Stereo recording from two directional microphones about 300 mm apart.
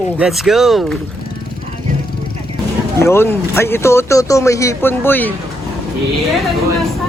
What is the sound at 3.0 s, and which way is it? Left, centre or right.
Speech, centre.